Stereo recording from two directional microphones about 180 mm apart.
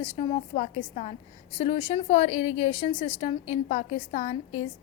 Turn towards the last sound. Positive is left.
turn(degrees=40)  # may be behind; listen again after turning